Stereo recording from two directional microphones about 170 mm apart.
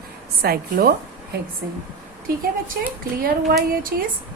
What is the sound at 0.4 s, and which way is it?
Speech, 65° right (ahead or behind).